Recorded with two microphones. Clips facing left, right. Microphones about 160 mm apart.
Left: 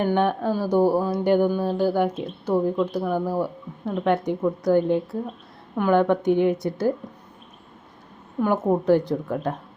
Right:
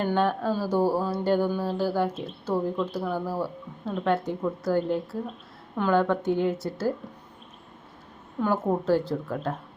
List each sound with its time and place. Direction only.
0.0 s speech: 15° left (ahead or behind)
8.4 s speech: 15° left (ahead or behind)